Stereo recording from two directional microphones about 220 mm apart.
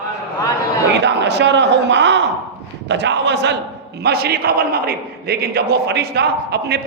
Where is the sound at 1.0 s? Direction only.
50° right (ahead or behind).